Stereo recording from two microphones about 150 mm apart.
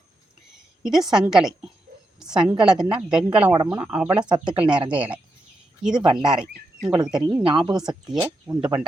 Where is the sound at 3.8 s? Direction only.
10° right (ahead or behind).